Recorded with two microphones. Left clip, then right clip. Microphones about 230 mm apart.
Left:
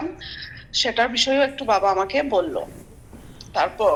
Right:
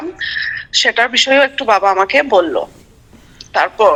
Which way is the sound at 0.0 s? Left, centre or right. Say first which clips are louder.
Right 12 dB; right.